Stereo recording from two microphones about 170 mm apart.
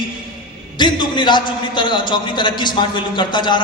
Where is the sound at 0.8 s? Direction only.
25° left (ahead or behind).